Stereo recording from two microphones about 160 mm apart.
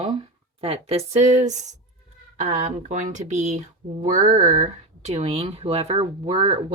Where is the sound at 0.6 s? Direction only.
40° right (ahead or behind).